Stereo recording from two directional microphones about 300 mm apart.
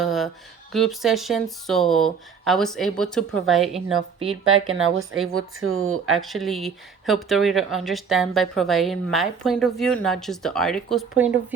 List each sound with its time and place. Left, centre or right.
0.0 s a sound: centre
0.7 s speech: centre
4.6 s speech: right
6.1 s speech: centre